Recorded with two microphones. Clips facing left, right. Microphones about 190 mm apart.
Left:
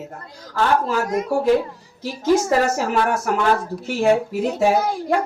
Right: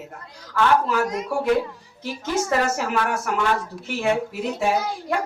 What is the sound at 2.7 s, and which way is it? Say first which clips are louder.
A woman's voice: left 4 dB; 40° left (ahead or behind).